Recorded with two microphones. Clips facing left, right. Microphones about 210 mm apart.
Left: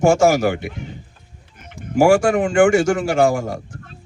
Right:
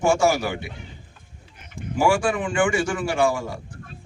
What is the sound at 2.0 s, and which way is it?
A man's voice, 45° left (ahead or behind).